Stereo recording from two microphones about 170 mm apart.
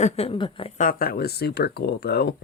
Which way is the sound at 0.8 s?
55° left (ahead or behind).